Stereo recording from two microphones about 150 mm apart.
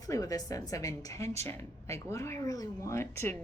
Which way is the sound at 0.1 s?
25° left (ahead or behind).